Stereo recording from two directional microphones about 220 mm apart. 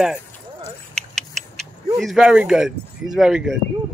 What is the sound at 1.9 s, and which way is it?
Speech, centre (ahead or behind).